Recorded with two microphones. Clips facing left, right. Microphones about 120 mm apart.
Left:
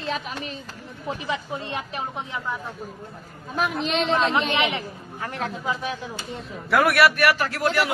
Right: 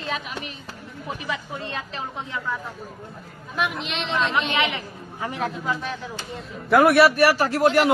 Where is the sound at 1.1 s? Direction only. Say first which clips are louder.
Left 2 dB; 20° left (ahead or behind).